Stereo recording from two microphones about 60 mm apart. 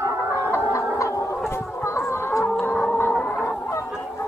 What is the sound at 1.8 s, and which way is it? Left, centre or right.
Music, left.